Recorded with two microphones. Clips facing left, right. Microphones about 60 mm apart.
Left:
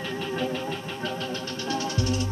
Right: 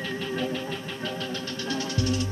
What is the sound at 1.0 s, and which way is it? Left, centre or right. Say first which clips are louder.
Music: left 1 dB; left.